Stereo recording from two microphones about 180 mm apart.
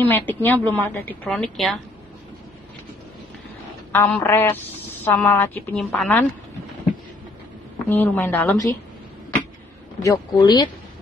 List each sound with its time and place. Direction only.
0.0 s a woman's voice: 10° left (ahead or behind)
3.9 s a woman's voice: 10° left (ahead or behind)
7.9 s a woman's voice: 10° left (ahead or behind)
10.0 s speech: 20° left (ahead or behind)